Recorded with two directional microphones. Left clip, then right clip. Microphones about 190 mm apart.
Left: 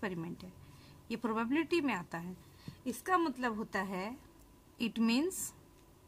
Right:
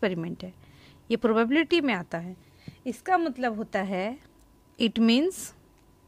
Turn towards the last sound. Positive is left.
turn(degrees=-35)  # may be behind; listen again after turning